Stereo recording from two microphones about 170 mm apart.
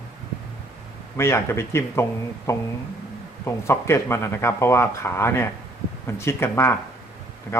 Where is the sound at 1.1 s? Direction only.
15° left (ahead or behind).